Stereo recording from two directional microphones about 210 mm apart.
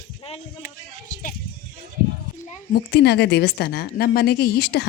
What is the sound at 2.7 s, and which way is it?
Speech, 50° left (ahead or behind).